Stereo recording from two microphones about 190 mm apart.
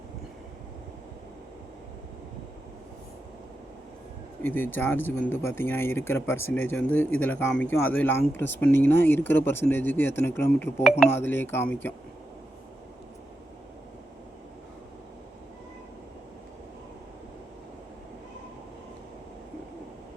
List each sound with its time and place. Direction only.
4.4 s speech: 10° left (ahead or behind)